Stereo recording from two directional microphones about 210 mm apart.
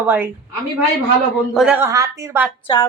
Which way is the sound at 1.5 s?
5° right (ahead or behind).